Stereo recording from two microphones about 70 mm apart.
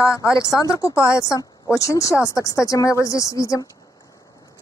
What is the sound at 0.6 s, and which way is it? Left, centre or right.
Speech, left.